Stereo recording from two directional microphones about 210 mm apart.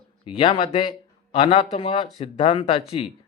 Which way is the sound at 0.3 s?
25° left (ahead or behind).